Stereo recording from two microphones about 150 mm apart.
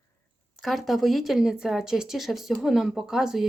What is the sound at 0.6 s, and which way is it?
Speech, centre (ahead or behind).